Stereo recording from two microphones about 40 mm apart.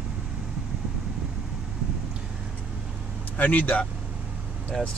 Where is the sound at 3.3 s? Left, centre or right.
Left.